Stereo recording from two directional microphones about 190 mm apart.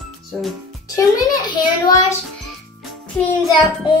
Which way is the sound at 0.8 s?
20° left (ahead or behind).